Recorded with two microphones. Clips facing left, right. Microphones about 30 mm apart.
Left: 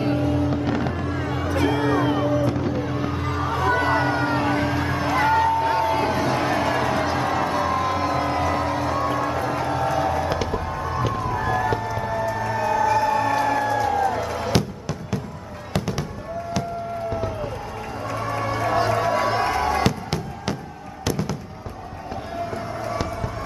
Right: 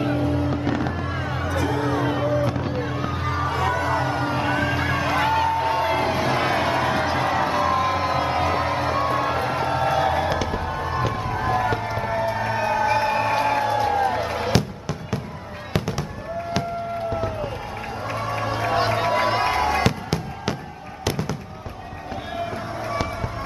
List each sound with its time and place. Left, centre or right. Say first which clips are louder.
0.2 s music: left 1 dB; right
0.7 s fireworks: even; centre
1.6 s music: left 3 dB; left
2.0 s vehicle: left 1 dB; centre
3.4 s music: left 2 dB; right
3.7 s music: left 2 dB; left
5.3 s music: left 2 dB; right
11.1 s run: even; right
11.9 s music: right 1 dB; right
14.5 s music: even; centre
15.7 s fireworks: even; centre
18.0 s music: left 1 dB; right
19.8 s fireworks: even; centre